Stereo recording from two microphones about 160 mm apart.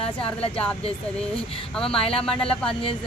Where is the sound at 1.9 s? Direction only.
35° left (ahead or behind).